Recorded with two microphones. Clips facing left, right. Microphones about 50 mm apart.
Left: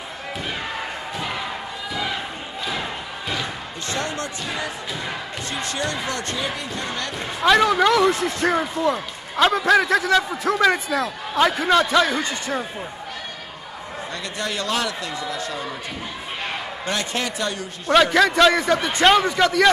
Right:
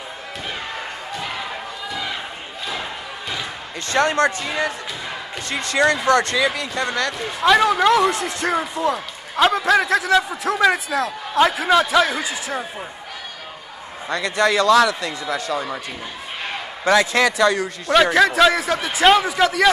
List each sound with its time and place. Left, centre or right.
1.1 s a sound: centre
2.6 s thump: centre
3.9 s speech: right
5.7 s speech: right
7.4 s speech: centre
14.1 s speech: right
16.9 s speech: right
17.9 s speech: centre